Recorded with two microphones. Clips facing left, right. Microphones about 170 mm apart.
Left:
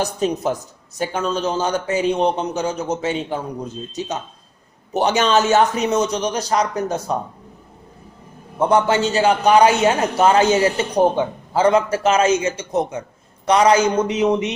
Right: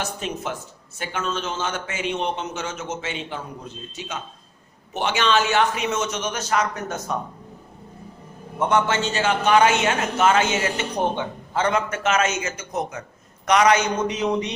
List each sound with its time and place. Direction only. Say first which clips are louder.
0.0 s a man's voice: left 8 dB; 40° left (ahead or behind)
4.9 s a man's voice: left 5 dB; 40° left (ahead or behind)
8.5 s a man's voice: left 5 dB; 30° left (ahead or behind)